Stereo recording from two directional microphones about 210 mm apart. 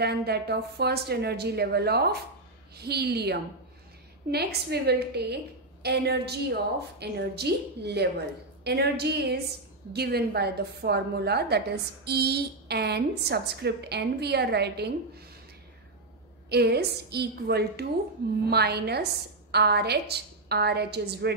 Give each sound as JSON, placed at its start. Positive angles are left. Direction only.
{"t": 0.0, "sound": "a woman's voice", "side_deg": -50}
{"t": 16.4, "sound": "a woman's voice", "side_deg": -50}